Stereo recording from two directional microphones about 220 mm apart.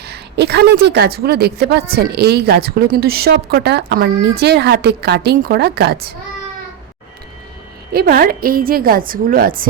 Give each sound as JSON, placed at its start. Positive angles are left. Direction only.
{"t": 0.0, "sound": "a woman's voice", "side_deg": -50}
{"t": 7.9, "sound": "a woman's voice", "side_deg": -45}